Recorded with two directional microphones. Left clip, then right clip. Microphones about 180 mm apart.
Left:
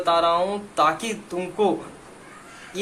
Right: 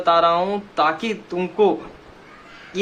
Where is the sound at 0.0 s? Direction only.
20° right (ahead or behind).